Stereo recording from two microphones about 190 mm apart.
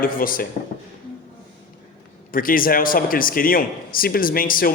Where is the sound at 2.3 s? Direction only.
50° left (ahead or behind).